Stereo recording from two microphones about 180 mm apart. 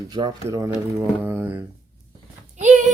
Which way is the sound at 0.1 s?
25° right (ahead or behind).